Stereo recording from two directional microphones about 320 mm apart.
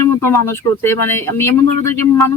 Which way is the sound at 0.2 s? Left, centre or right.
Centre.